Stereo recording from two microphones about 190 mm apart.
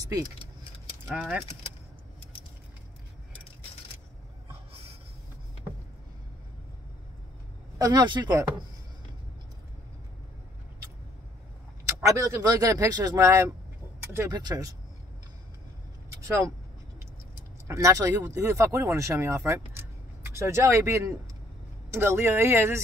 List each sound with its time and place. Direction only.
1.0 s speech: 5° right (ahead or behind)
7.8 s speech: 20° right (ahead or behind)
11.8 s speech: 15° right (ahead or behind)
17.6 s speech: 15° right (ahead or behind)